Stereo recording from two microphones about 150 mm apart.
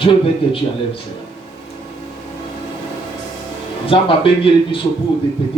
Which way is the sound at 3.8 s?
35° left (ahead or behind).